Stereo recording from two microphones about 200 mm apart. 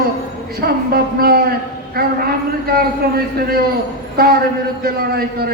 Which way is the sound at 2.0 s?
50° right (ahead or behind).